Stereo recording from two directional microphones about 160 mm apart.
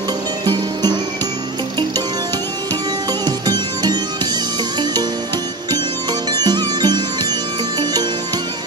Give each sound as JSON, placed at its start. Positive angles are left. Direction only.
{"t": 3.1, "sound": "music", "side_deg": -25}
{"t": 6.3, "sound": "music", "side_deg": -25}